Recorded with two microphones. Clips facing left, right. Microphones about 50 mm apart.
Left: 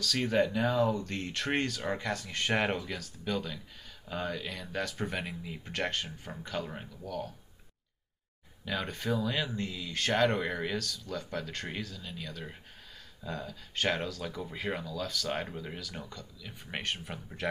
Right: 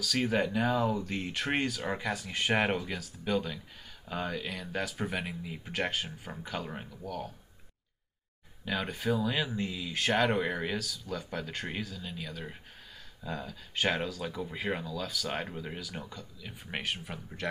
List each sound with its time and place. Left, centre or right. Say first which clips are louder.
0.0 s speech: left 1 dB; centre
8.6 s speech: right 2 dB; centre